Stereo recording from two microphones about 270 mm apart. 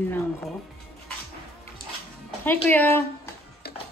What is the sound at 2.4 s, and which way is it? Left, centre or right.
Speech, centre.